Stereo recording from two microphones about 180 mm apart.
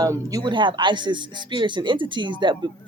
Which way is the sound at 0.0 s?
20° right (ahead or behind).